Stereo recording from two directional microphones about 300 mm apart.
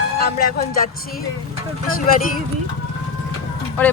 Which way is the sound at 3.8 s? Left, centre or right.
Centre.